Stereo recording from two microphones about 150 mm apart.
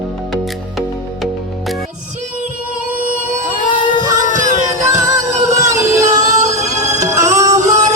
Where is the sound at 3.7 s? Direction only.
30° left (ahead or behind).